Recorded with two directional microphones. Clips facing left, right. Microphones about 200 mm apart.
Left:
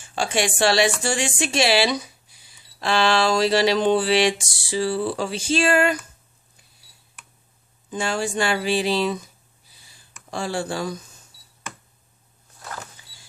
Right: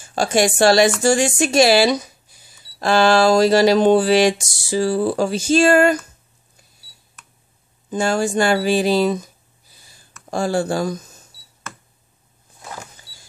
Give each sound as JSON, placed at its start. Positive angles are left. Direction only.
{"t": 0.0, "sound": "speech", "side_deg": -40}
{"t": 7.9, "sound": "speech", "side_deg": -45}
{"t": 10.3, "sound": "speech", "side_deg": -45}
{"t": 12.5, "sound": "power windows", "side_deg": -15}